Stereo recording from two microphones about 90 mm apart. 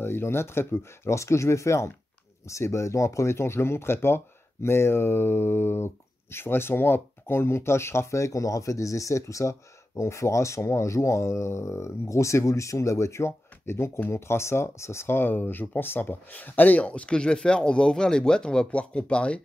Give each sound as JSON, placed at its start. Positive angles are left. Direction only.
{"t": 0.0, "sound": "speech", "side_deg": 25}